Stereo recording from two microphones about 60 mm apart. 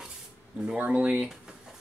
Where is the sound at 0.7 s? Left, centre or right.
Right.